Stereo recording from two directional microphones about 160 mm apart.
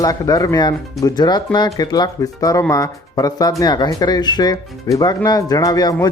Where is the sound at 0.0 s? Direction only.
20° left (ahead or behind).